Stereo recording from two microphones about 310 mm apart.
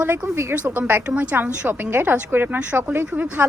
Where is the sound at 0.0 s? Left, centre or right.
Centre.